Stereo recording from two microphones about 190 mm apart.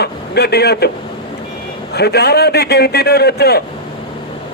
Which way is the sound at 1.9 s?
60° left (ahead or behind).